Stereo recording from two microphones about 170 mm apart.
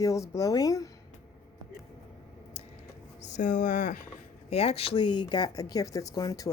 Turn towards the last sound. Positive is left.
turn(degrees=20)  # may be behind; listen again after turning